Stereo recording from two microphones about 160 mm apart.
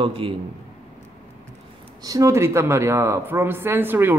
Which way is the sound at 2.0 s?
20° right (ahead or behind).